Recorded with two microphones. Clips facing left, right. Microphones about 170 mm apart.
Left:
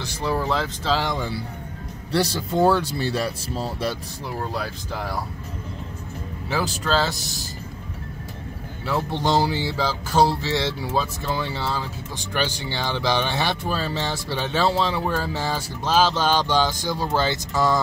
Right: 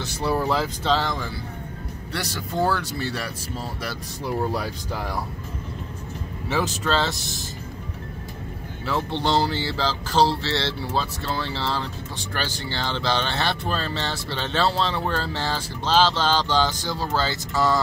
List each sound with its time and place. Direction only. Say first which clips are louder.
0.0 s speech: right 1 dB; 5° right (ahead or behind)
0.9 s speech: left 1 dB; 20° left (ahead or behind)
4.5 s speech: right 2 dB; centre (ahead or behind)
6.8 s speech: left 1 dB; centre (ahead or behind)
8.8 s speech: left 1 dB; 10° left (ahead or behind)